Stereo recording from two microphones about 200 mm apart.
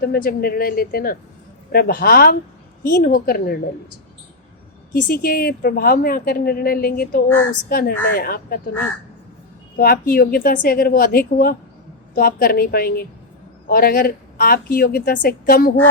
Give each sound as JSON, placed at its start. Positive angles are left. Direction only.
{"t": 0.0, "sound": "a woman's voice", "side_deg": 50}
{"t": 4.9, "sound": "a woman's voice", "side_deg": 45}
{"t": 9.7, "sound": "a woman's voice", "side_deg": 50}